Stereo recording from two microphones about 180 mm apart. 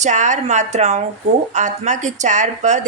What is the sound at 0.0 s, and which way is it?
A woman's voice, 40° right (ahead or behind).